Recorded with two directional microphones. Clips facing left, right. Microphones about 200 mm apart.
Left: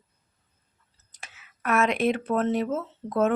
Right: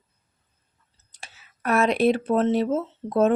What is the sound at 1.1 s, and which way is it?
Speech, 30° right (ahead or behind).